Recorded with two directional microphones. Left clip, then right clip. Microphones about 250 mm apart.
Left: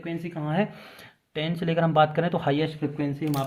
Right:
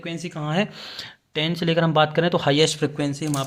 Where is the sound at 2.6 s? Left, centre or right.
Right.